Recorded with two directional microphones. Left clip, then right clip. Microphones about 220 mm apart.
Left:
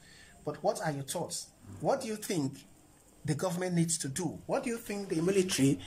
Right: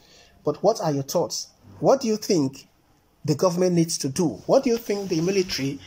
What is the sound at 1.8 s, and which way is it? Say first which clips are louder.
Speech: right 12 dB; 5° right (ahead or behind).